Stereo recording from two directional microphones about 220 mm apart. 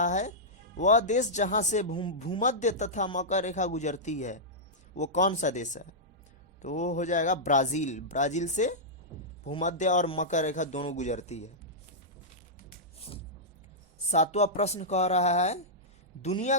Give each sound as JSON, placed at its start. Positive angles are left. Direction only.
{"t": 0.0, "sound": "speech", "side_deg": 35}
{"t": 13.0, "sound": "music", "side_deg": 25}
{"t": 14.1, "sound": "speech", "side_deg": 30}